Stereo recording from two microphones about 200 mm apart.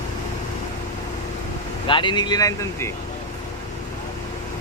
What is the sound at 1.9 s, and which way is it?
Speech, 25° left (ahead or behind).